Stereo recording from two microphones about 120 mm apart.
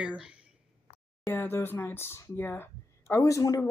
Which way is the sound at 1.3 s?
20° left (ahead or behind).